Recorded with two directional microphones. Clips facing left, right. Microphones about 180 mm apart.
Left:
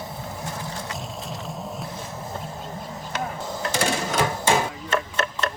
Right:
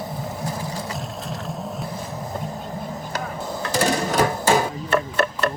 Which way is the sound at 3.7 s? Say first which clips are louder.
Right 4 dB; 35° right (ahead or behind).